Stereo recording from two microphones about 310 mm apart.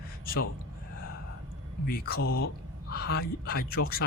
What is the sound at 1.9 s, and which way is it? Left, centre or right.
Speech, left.